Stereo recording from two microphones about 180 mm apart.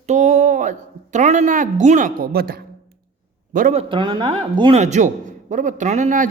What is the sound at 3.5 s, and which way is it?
Speech, 50° right (ahead or behind).